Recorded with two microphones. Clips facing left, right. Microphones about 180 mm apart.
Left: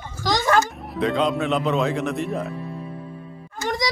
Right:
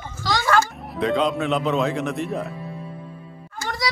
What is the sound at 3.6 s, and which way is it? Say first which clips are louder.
Speech: left 4 dB; 20° left (ahead or behind).